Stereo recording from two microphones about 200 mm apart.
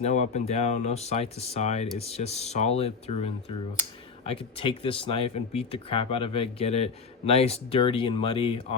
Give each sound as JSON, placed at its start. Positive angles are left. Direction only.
{"t": 0.0, "sound": "speech", "side_deg": 35}